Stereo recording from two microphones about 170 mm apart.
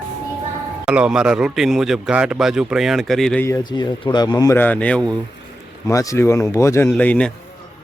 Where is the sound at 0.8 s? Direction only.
5° right (ahead or behind).